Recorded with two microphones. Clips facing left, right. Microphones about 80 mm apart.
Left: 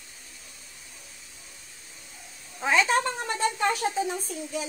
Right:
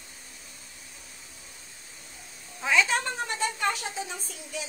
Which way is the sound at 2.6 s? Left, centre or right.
Left.